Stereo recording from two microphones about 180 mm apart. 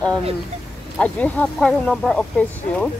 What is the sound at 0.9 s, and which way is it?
Speech, 10° left (ahead or behind).